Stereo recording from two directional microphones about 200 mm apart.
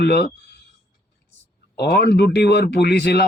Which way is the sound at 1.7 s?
50° left (ahead or behind).